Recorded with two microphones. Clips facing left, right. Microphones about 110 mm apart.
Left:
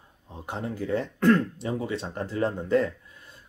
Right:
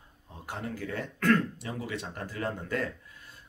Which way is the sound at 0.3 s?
20° left (ahead or behind).